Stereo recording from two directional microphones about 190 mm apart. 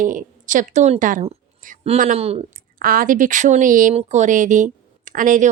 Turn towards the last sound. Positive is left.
turn(degrees=-45)  # may be behind; listen again after turning